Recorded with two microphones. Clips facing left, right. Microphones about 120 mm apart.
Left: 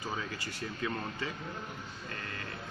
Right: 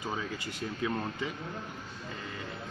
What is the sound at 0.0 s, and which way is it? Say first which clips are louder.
Speech: right 2 dB; 20° right (ahead or behind).